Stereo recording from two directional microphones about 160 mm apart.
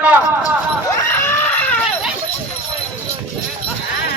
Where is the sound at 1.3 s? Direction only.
10° left (ahead or behind).